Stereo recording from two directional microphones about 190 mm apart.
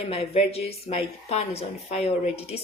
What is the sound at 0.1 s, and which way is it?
A woman's voice, 30° left (ahead or behind).